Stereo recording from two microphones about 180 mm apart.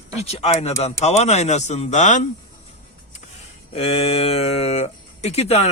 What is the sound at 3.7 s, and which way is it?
Speech, 35° left (ahead or behind).